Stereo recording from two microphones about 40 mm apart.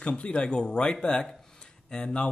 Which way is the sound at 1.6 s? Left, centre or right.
Centre.